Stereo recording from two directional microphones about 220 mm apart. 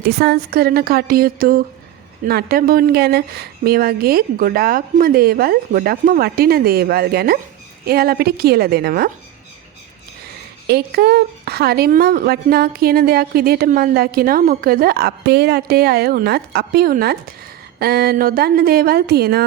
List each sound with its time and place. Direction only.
0.0 s a woman's voice: 45° right (ahead or behind)
10.7 s a woman's voice: 45° right (ahead or behind)